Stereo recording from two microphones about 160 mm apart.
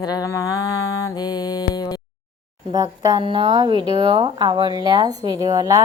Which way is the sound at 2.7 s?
25° right (ahead or behind).